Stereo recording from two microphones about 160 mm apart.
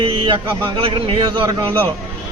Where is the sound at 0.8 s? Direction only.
35° right (ahead or behind).